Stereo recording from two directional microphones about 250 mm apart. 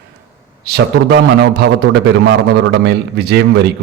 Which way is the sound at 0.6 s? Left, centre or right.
Right.